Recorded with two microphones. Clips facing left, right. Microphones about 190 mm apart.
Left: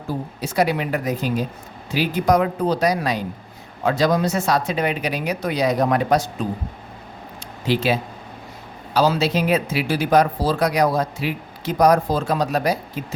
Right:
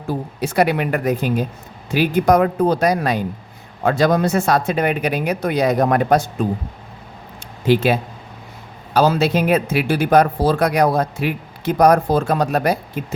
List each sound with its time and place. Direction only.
0.4 s a man's voice: 60° right (ahead or behind)
7.7 s a man's voice: 50° right (ahead or behind)